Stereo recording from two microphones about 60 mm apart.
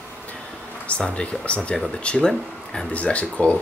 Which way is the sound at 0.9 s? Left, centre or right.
Left.